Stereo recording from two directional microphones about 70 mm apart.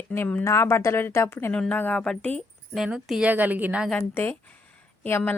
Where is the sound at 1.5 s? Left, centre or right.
Centre.